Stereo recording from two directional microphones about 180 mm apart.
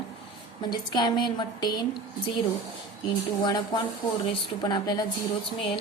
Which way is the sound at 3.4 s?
20° left (ahead or behind).